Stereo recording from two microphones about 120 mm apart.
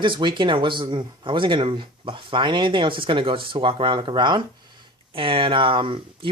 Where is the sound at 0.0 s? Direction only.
45° right (ahead or behind).